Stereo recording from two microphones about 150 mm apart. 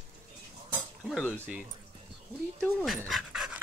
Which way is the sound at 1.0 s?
Centre (ahead or behind).